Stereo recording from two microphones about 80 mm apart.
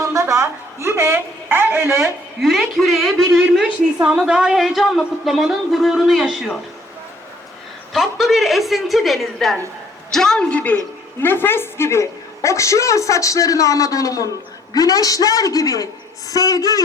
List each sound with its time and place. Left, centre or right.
0.0 s a sound: right
1.9 s a woman's voice: centre
7.9 s a woman's voice: centre; by 16.8 s left